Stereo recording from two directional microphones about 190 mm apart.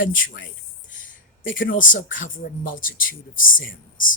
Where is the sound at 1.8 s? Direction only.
45° left (ahead or behind).